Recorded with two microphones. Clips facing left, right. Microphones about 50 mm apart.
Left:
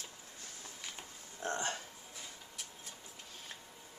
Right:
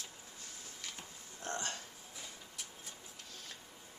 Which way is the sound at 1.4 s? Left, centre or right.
Left.